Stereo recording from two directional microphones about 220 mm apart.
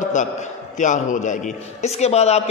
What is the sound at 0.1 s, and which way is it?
A man's voice, 35° left (ahead or behind).